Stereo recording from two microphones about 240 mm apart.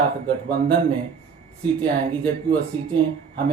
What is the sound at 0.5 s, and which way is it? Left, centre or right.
Speech, centre.